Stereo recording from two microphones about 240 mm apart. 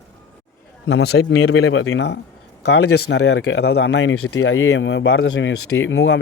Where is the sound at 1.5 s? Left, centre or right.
Left.